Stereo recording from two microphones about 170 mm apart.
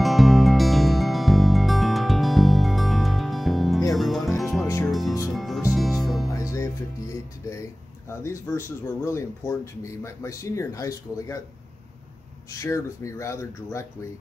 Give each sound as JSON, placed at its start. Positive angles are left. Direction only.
{"t": 0.0, "sound": "music", "side_deg": 0}
{"t": 6.3, "sound": "music", "side_deg": 15}
{"t": 8.2, "sound": "speech", "side_deg": 15}
{"t": 12.4, "sound": "speech", "side_deg": 15}